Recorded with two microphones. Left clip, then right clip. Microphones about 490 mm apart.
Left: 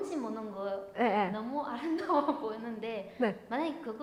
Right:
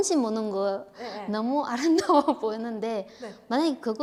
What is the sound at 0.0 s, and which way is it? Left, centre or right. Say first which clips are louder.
Speech: right 11 dB; right.